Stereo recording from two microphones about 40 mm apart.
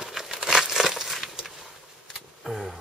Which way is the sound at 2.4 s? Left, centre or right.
Centre.